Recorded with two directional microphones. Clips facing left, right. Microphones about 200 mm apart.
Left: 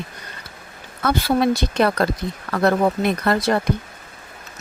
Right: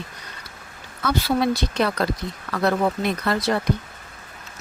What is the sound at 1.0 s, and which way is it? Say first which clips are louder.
Speech: left 3 dB; 50° left (ahead or behind).